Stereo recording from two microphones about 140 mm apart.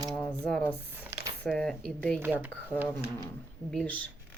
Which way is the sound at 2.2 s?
10° right (ahead or behind).